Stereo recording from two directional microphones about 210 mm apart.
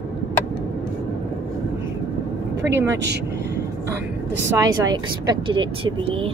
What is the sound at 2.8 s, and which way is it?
Speech, 55° right (ahead or behind).